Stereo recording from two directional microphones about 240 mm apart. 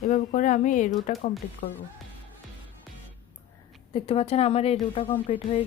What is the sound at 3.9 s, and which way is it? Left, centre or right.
A woman's voice, left.